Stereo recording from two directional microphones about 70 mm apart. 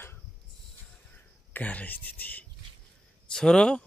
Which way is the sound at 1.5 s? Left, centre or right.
Left.